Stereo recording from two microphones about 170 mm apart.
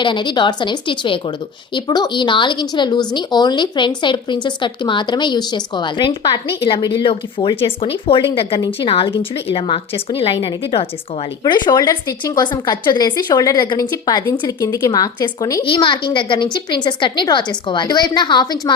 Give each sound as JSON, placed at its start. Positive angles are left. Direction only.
{"t": 0.0, "sound": "a woman's voice", "side_deg": 30}